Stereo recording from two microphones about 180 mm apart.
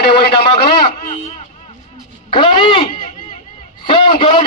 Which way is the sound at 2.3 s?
25° left (ahead or behind).